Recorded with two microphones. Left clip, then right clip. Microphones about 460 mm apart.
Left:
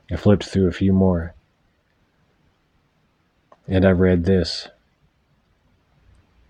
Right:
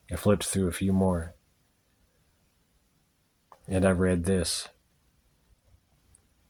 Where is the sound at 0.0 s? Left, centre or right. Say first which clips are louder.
Left 7 dB; right.